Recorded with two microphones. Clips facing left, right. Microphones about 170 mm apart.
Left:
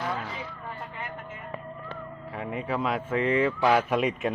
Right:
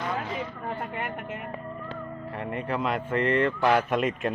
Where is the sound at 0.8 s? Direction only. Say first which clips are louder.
Right 5 dB; 65° right (ahead or behind).